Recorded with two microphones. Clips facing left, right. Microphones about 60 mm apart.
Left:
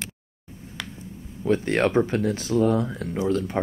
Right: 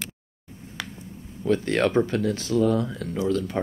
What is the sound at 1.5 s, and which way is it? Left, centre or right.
Speech, left.